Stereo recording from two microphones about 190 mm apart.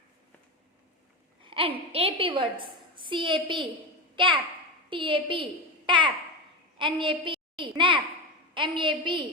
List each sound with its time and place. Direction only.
1.4 s a woman's voice: 30° right (ahead or behind)